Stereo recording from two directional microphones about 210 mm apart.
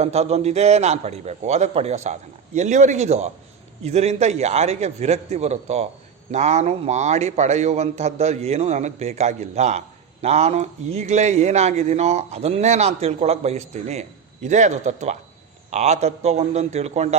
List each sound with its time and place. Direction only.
0.0 s a man's voice: 30° right (ahead or behind)